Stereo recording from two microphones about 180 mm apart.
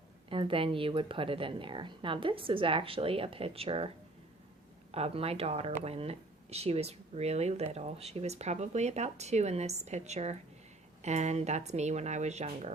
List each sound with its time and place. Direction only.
0.3 s speech: 30° right (ahead or behind)